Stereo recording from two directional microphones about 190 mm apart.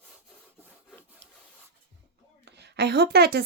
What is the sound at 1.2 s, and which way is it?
Rub, 65° right (ahead or behind).